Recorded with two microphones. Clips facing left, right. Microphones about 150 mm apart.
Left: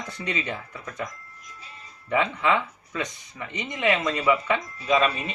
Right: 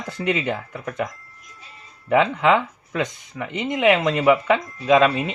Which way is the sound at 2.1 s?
75° right (ahead or behind).